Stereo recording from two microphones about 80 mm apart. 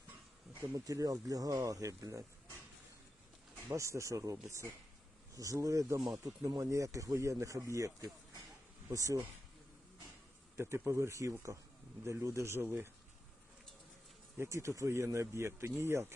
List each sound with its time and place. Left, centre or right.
0.6 s speech: right
3.7 s speech: right
10.8 s speech: right
14.3 s speech: right